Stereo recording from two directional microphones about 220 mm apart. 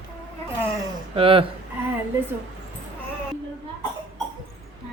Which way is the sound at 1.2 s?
25° right (ahead or behind).